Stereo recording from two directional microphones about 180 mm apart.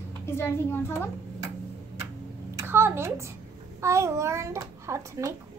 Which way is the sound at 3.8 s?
15° right (ahead or behind).